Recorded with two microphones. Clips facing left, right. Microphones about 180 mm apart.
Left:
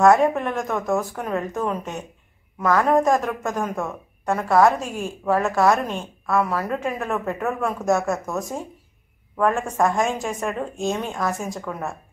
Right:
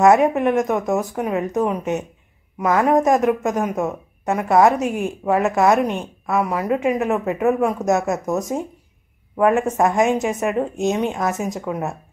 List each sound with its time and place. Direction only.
0.1 s a woman's voice: 20° right (ahead or behind)
9.4 s a woman's voice: 20° right (ahead or behind)